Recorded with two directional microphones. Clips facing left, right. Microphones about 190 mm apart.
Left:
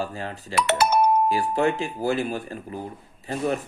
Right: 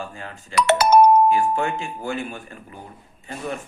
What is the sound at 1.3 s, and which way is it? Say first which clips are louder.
Speech: right 1 dB; 35° left (ahead or behind).